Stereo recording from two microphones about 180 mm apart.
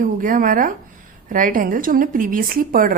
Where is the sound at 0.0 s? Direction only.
50° right (ahead or behind).